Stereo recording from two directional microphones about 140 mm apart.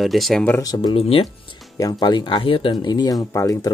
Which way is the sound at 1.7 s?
25° left (ahead or behind).